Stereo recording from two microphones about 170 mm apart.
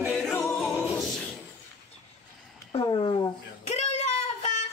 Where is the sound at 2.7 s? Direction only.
30° left (ahead or behind).